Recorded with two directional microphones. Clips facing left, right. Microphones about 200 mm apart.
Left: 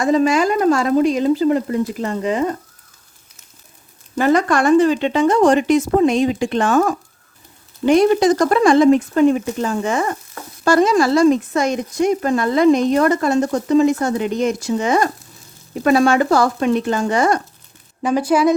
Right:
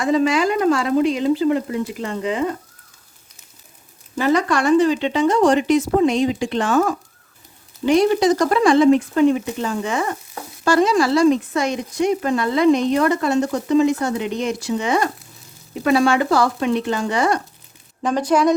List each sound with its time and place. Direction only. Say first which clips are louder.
0.0 s speech: left 2 dB; 45° left (ahead or behind)
4.1 s speech: left 3 dB; 50° left (ahead or behind)
18.0 s a woman's voice: left 2 dB; 5° left (ahead or behind)